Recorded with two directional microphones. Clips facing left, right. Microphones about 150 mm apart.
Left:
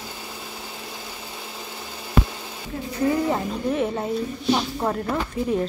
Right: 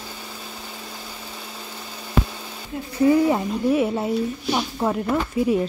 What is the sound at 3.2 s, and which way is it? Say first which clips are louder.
Speech: right 4 dB; 10° right (ahead or behind).